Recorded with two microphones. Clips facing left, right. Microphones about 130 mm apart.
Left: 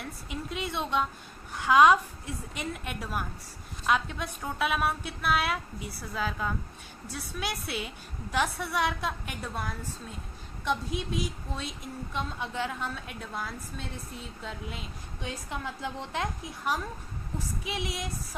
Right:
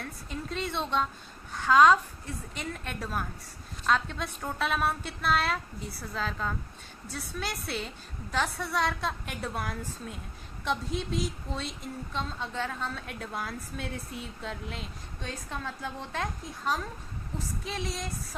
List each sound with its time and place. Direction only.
0.0 s a woman's voice: 10° left (ahead or behind)
4.2 s a woman's voice: 5° left (ahead or behind)
12.1 s a woman's voice: 10° left (ahead or behind)
13.1 s a woman's voice: centre (ahead or behind)
15.2 s a woman's voice: 15° left (ahead or behind)